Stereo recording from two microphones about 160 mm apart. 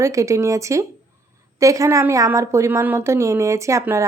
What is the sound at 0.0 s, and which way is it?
A woman's voice, 20° right (ahead or behind).